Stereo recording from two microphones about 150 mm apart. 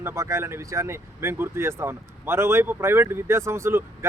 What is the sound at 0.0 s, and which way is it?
Speech, 20° right (ahead or behind).